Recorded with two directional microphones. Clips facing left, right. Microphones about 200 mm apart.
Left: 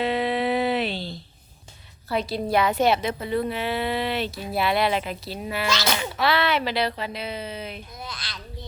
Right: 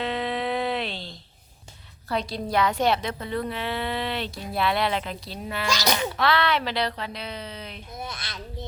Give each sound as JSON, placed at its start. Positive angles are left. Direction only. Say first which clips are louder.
{"t": 0.0, "sound": "a sound", "louder": "left 4 dB", "side_deg": 10}
{"t": 2.0, "sound": "a woman's voice", "louder": "left 3 dB", "side_deg": 5}
{"t": 5.6, "sound": "speech", "louder": "right 1 dB", "side_deg": -15}
{"t": 6.1, "sound": "a woman's voice", "louder": "left 4 dB", "side_deg": 5}
{"t": 7.9, "sound": "a child's voice", "louder": "right 2 dB", "side_deg": -25}